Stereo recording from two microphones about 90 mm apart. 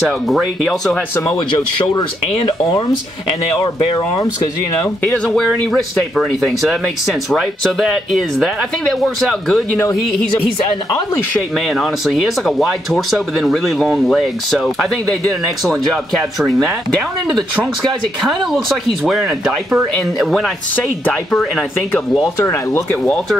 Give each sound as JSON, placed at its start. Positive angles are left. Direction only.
{"t": 0.3, "sound": "speech", "side_deg": 0}
{"t": 2.0, "sound": "speech", "side_deg": 60}
{"t": 5.2, "sound": "speech", "side_deg": 5}
{"t": 11.5, "sound": "speech", "side_deg": 0}
{"t": 18.2, "sound": "speech", "side_deg": 0}
{"t": 22.2, "sound": "speech", "side_deg": 30}